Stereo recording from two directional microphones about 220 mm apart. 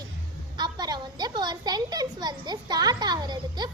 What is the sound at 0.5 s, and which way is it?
A woman's voice, 20° right (ahead or behind).